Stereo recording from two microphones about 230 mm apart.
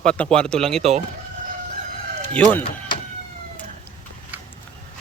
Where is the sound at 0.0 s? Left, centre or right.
Centre.